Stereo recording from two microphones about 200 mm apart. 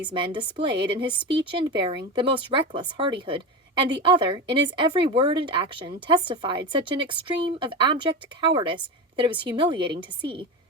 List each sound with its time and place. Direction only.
0.1 s speech: 25° right (ahead or behind)